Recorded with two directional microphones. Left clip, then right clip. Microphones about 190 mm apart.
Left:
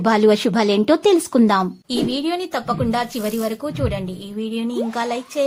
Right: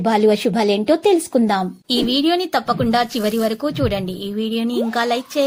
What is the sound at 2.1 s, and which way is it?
A woman's voice, 25° right (ahead or behind).